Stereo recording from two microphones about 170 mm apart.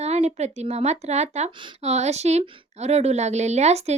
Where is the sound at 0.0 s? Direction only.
40° right (ahead or behind).